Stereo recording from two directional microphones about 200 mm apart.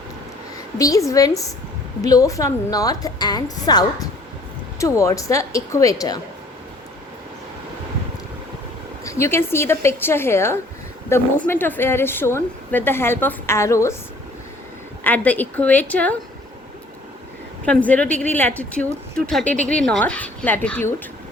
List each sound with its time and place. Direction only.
0.8 s a woman's voice: 15° left (ahead or behind)
9.0 s a woman's voice: 15° left (ahead or behind)
15.0 s a woman's voice: 10° left (ahead or behind)
17.7 s a woman's voice: 5° left (ahead or behind)